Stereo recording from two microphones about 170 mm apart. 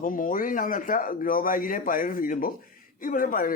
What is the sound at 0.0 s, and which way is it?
A man's voice, 50° left (ahead or behind).